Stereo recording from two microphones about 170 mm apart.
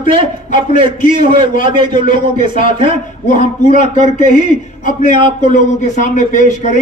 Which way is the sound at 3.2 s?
45° left (ahead or behind).